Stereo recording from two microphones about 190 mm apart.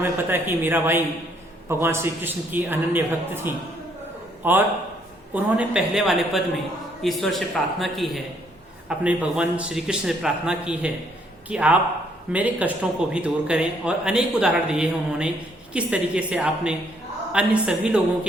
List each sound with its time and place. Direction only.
0.0 s a man's voice: 10° right (ahead or behind)